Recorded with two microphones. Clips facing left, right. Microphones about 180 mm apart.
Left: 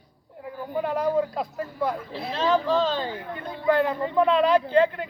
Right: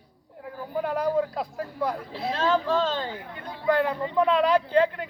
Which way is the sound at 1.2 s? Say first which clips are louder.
Left 1 dB; centre (ahead or behind).